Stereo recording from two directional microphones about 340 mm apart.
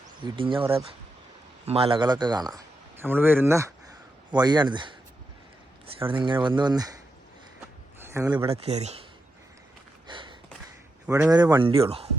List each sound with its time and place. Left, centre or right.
0.3 s speech: centre
6.0 s speech: centre
8.0 s speech: centre
10.1 s a sound: centre
11.0 s speech: centre